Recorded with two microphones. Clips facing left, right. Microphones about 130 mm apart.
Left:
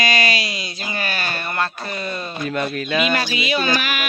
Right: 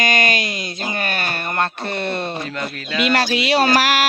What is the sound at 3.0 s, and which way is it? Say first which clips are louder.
Speech: right 4 dB; 80° right.